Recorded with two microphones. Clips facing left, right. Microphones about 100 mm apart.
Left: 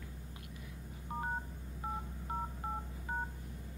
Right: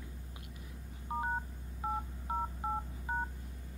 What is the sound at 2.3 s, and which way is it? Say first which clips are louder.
Telephone dialing: right 4 dB; 20° right (ahead or behind).